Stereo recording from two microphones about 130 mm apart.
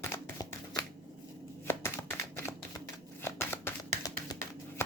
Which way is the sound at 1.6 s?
20° left (ahead or behind).